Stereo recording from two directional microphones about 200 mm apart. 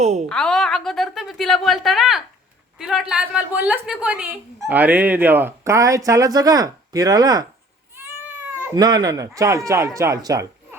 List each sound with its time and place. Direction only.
0.0 s a woman's voice: 35° right (ahead or behind)
0.3 s a woman's voice: 5° left (ahead or behind); by 7.4 s 20° right (ahead or behind)
8.6 s a woman's voice: 20° right (ahead or behind)